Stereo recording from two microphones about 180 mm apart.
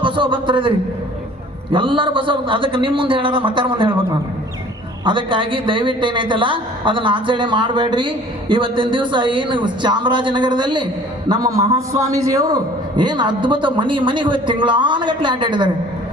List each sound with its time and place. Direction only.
0.0 s a man's voice: 25° right (ahead or behind)
1.7 s a man's voice: 25° right (ahead or behind)
5.0 s a man's voice: 30° right (ahead or behind)